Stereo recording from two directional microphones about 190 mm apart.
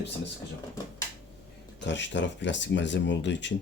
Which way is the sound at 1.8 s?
70° left (ahead or behind).